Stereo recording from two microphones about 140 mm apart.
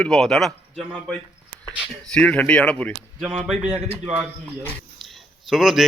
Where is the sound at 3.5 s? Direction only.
5° right (ahead or behind).